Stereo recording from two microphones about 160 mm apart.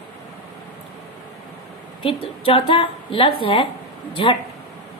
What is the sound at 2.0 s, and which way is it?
Speech, 35° left (ahead or behind).